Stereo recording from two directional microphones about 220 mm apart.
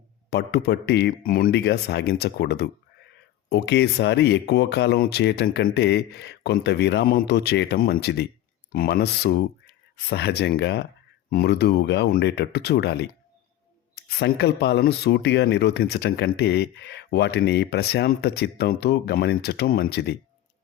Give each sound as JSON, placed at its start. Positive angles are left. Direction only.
{"t": 0.3, "sound": "speech", "side_deg": 50}